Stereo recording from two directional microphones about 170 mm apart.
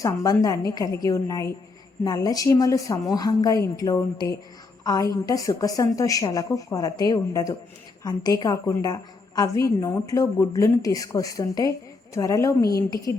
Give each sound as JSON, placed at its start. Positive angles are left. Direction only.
{"t": 0.0, "sound": "a woman's voice", "side_deg": 20}